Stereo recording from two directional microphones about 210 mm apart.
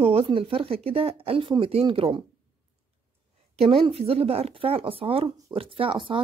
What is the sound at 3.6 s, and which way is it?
Speech, 25° right (ahead or behind).